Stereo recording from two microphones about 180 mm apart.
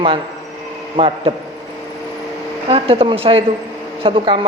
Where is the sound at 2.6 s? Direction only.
30° right (ahead or behind).